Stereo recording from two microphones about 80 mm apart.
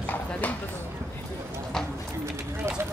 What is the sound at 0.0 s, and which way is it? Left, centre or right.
Clip-clop, left.